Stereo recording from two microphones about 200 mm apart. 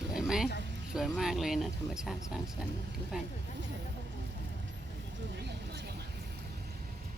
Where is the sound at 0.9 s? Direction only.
Centre (ahead or behind).